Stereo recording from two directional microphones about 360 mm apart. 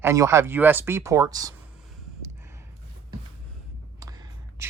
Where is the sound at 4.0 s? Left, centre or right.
Centre.